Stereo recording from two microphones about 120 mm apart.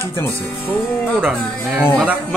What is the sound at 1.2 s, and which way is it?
Speech, 5° right (ahead or behind).